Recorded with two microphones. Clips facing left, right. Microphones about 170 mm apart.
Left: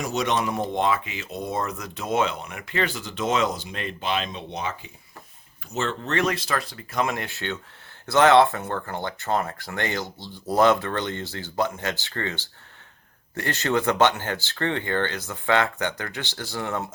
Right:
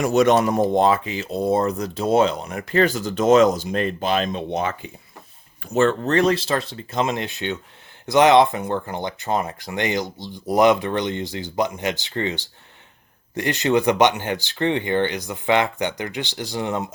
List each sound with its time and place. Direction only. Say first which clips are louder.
0.0 s speech: right 9 dB; 50° right (ahead or behind); by 16.9 s 20° right (ahead or behind)